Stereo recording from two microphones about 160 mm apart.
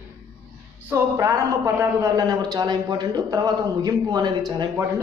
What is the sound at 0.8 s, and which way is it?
A woman's voice, 15° right (ahead or behind).